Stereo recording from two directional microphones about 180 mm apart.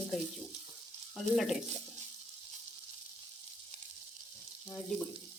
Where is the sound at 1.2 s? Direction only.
Centre (ahead or behind).